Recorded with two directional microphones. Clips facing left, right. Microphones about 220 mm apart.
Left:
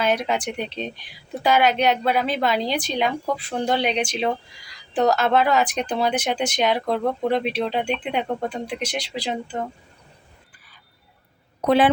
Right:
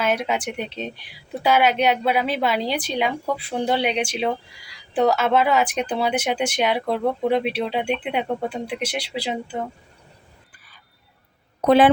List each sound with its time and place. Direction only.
0.0 s speech: 5° right (ahead or behind)
11.6 s a woman's voice: 45° right (ahead or behind)